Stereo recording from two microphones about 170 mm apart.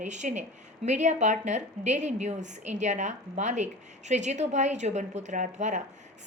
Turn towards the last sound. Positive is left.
turn(degrees=-45)  # may be behind; listen again after turning